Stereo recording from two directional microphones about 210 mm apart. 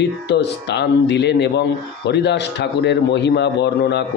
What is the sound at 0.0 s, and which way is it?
Speech, 55° left (ahead or behind).